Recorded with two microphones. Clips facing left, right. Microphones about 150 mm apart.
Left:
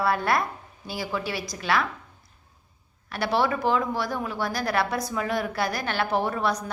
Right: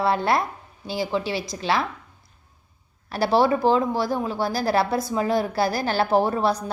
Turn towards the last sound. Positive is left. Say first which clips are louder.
# right 5 dB
turn(degrees=-30)  # may be behind; listen again after turning